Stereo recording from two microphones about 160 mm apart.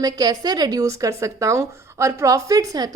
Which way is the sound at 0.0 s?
25° right (ahead or behind).